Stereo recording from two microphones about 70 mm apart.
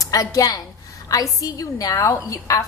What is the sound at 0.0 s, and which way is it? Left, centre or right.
A woman's voice, left.